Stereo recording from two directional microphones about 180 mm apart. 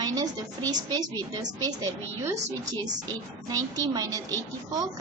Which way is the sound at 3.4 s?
20° right (ahead or behind).